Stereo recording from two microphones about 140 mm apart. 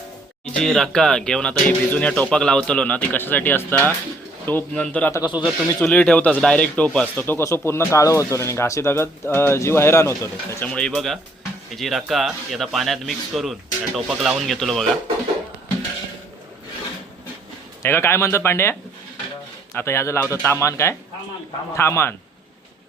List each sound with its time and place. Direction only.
0.5 s a man's voice: 5° left (ahead or behind)
5.3 s speech: 10° right (ahead or behind)
5.8 s a man's voice: 10° left (ahead or behind)
10.7 s speech: 5° left (ahead or behind)
17.8 s a man's voice: 15° left (ahead or behind)